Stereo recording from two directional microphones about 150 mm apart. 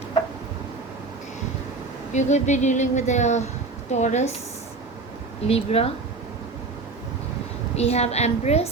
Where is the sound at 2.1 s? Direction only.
50° left (ahead or behind).